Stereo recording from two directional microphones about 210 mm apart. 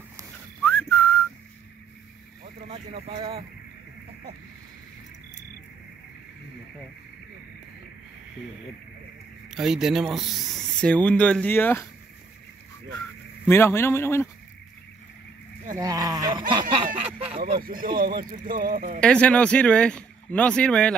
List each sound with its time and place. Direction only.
0.7 s whistling: 10° left (ahead or behind)
2.4 s vehicle: 25° right (ahead or behind)
9.5 s speech: centre (ahead or behind)
13.5 s speech: 10° left (ahead or behind)
15.8 s speech: 15° right (ahead or behind)
16.7 s a sound: 25° right (ahead or behind)
17.6 s speech: 40° right (ahead or behind)
18.9 s speech: 5° left (ahead or behind)